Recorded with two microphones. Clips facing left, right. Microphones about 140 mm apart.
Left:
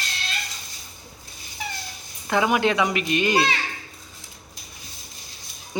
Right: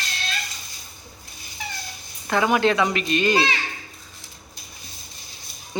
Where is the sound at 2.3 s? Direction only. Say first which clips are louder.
Right 1 dB; 10° left (ahead or behind).